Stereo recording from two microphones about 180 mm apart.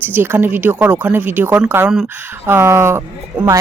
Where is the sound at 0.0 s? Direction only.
10° right (ahead or behind).